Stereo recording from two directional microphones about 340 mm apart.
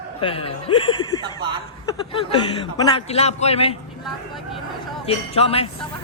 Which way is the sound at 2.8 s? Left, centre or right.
Centre.